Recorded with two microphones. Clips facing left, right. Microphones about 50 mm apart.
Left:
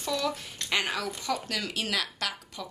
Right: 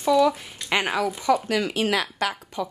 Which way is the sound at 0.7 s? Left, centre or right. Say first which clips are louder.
Right 6 dB; right.